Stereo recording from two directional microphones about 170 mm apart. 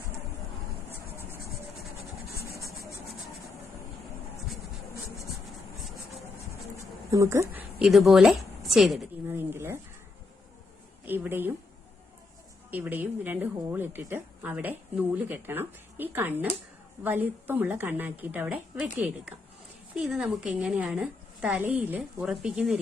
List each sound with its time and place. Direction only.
7.1 s speech: 20° right (ahead or behind)
7.8 s a woman's voice: centre (ahead or behind)
9.2 s a sound: 15° right (ahead or behind)
11.0 s a woman's voice: 10° right (ahead or behind)
12.7 s a woman's voice: 10° right (ahead or behind)